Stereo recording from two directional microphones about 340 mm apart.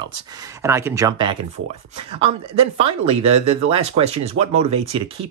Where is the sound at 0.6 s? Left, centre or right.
Centre.